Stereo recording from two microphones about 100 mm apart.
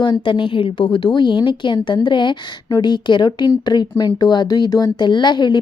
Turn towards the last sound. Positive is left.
turn(degrees=50)  # may be behind; listen again after turning